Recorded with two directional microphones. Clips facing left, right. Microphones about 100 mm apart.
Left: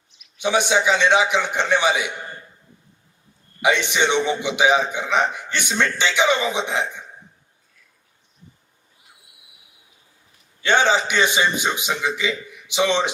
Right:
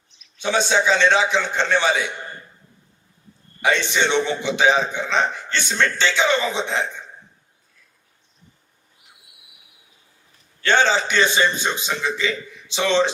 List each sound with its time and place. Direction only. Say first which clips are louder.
0.3 s a man's voice: left 1 dB; 15° left (ahead or behind)
3.6 s a man's voice: left 1 dB; 15° left (ahead or behind)
10.6 s a man's voice: even; 15° left (ahead or behind)